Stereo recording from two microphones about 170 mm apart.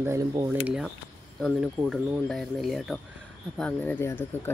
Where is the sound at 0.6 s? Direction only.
5° right (ahead or behind).